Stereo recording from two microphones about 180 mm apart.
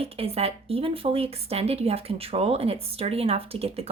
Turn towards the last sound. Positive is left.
turn(degrees=-35)  # may be behind; listen again after turning